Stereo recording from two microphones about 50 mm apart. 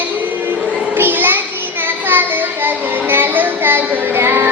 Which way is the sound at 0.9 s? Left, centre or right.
Right.